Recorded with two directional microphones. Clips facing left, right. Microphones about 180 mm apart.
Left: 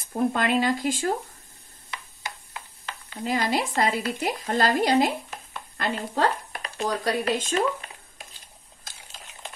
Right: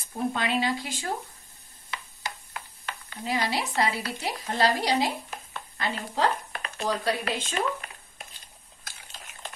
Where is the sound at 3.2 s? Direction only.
50° left (ahead or behind).